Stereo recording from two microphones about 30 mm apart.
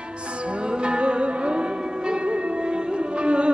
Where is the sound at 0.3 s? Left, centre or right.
Right.